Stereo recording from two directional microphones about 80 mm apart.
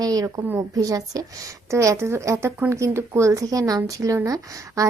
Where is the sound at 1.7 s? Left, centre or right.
Right.